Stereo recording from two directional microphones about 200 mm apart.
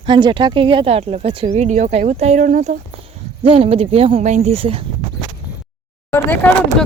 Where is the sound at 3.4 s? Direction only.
30° right (ahead or behind).